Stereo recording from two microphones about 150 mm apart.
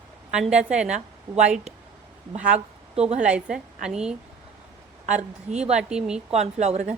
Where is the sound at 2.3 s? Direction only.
5° right (ahead or behind).